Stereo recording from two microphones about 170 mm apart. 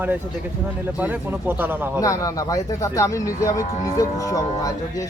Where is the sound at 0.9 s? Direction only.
10° right (ahead or behind).